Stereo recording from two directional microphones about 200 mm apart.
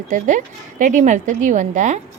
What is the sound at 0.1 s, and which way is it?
A woman's voice, 40° right (ahead or behind).